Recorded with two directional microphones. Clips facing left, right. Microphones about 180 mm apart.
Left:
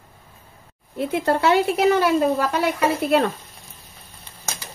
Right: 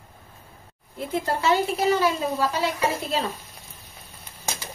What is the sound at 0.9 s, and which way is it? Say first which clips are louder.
A woman's voice: left 6 dB; 65° left (ahead or behind).